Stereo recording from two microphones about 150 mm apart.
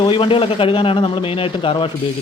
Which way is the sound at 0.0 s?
35° left (ahead or behind).